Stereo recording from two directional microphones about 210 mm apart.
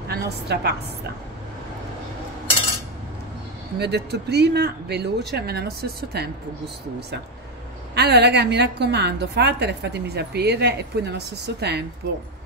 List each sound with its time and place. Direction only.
0.1 s a woman's voice: 50° right (ahead or behind)
3.7 s a woman's voice: 50° right (ahead or behind)
7.9 s a woman's voice: 55° right (ahead or behind)